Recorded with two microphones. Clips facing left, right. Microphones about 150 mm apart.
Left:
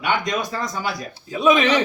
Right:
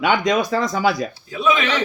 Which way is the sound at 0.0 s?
90° right.